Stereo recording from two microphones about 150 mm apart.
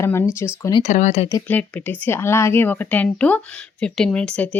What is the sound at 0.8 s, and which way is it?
Speech, 50° left (ahead or behind).